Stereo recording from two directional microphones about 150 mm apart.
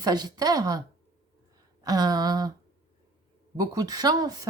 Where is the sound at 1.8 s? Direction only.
25° right (ahead or behind).